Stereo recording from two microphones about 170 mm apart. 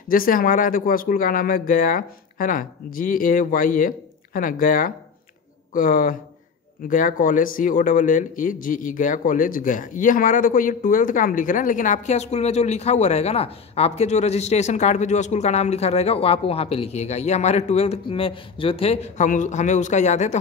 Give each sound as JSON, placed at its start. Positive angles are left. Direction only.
{"t": 0.1, "sound": "speech", "side_deg": 55}